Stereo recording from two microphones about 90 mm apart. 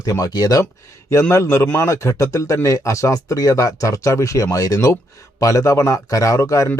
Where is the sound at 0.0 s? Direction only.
45° left (ahead or behind).